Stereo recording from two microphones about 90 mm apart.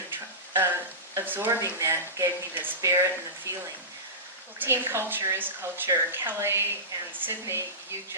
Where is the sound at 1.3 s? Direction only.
25° right (ahead or behind).